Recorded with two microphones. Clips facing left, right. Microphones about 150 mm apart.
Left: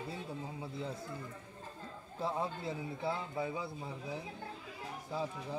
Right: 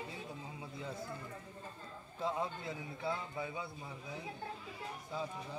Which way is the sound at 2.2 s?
30° left (ahead or behind).